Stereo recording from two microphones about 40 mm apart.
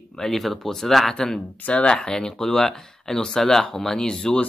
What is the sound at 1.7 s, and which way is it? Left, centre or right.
Speech, left.